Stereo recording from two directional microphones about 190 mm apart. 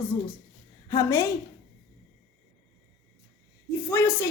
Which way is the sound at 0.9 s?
15° left (ahead or behind).